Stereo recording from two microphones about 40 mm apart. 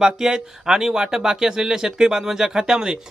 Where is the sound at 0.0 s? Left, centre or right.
Centre.